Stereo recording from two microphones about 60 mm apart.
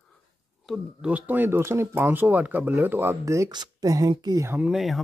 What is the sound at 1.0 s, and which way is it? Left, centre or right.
Speech, right.